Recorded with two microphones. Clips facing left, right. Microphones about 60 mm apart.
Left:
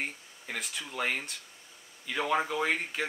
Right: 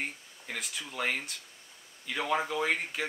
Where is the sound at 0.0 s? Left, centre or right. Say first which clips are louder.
Left 1 dB; centre.